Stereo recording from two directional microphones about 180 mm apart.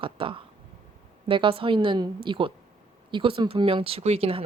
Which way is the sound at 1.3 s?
30° right (ahead or behind).